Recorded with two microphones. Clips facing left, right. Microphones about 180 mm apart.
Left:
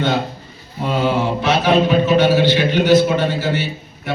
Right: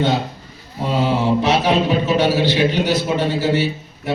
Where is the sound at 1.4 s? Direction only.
35° right (ahead or behind).